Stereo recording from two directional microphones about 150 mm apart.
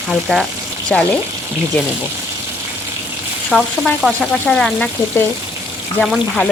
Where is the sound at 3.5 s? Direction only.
Centre (ahead or behind).